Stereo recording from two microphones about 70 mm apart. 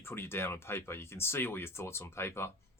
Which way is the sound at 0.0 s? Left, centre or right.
Left.